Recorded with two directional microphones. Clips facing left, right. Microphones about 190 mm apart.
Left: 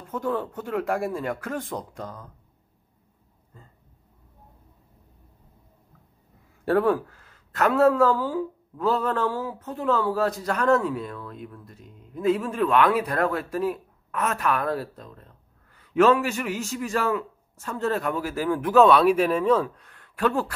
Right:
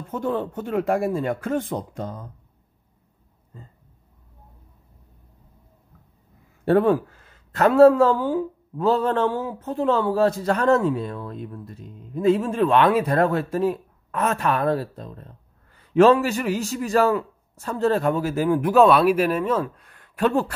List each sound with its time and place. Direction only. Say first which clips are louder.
0.1 s speech: right 2 dB; 25° right (ahead or behind)
6.6 s a man's voice: right 3 dB; 25° right (ahead or behind); by 19.7 s 5° right (ahead or behind)
19.9 s a sound: right 4 dB; 20° right (ahead or behind)